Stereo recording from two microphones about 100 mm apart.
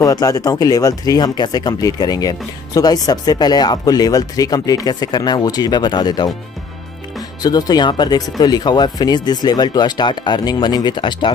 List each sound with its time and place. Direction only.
0.0 s speech: 35° left (ahead or behind)
7.4 s speech: 40° left (ahead or behind)